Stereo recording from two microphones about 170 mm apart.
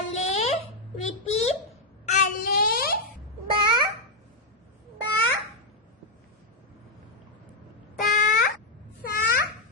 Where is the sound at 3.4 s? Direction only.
30° right (ahead or behind).